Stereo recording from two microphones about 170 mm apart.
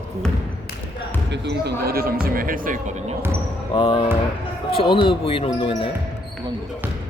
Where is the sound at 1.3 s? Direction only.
80° right; by 3.2 s 50° right (ahead or behind).